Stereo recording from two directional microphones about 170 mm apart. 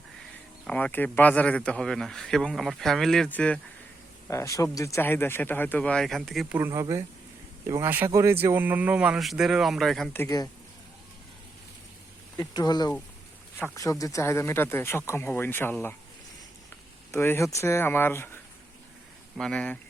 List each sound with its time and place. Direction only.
0.7 s speech: 10° left (ahead or behind)
6.6 s speech: 15° right (ahead or behind); by 10.1 s centre (ahead or behind)
10.1 s speech: 15° left (ahead or behind)
12.4 s speech: 25° left (ahead or behind)
14.0 s speech: 15° left (ahead or behind)
19.4 s speech: 5° left (ahead or behind)